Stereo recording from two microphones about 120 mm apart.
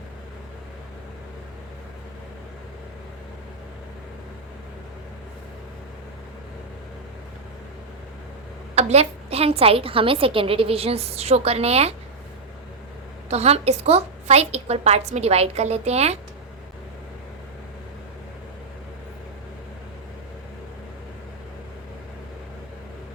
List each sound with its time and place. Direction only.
8.7 s a woman's voice: 65° right (ahead or behind)
13.3 s a woman's voice: 60° right (ahead or behind)